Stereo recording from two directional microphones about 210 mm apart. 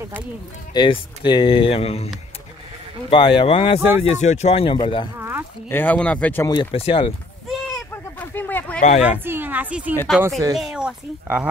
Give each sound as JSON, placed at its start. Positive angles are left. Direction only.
{"t": 0.7, "sound": "speech", "side_deg": 25}
{"t": 3.1, "sound": "speech", "side_deg": 25}
{"t": 5.7, "sound": "a man's voice", "side_deg": 10}
{"t": 6.5, "sound": "speech", "side_deg": 25}
{"t": 7.4, "sound": "a sound", "side_deg": 0}
{"t": 9.2, "sound": "speech", "side_deg": -10}